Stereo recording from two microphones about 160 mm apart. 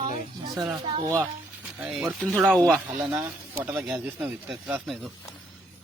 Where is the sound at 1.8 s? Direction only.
10° right (ahead or behind).